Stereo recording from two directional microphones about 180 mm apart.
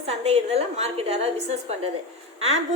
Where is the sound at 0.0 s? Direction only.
35° right (ahead or behind).